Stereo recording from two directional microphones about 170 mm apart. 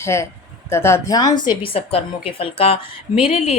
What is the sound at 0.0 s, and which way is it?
A woman's voice, 15° left (ahead or behind).